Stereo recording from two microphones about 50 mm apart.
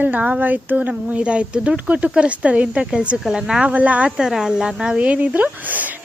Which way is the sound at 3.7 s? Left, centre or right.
Right.